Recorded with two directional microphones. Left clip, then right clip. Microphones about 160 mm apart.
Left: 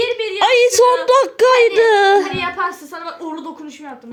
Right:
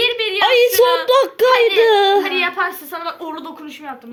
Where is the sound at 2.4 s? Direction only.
25° right (ahead or behind).